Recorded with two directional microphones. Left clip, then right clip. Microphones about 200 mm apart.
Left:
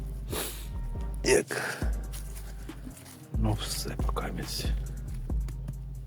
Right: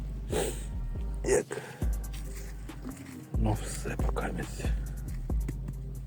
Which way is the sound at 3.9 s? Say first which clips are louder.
Right 1 dB; 5° left (ahead or behind).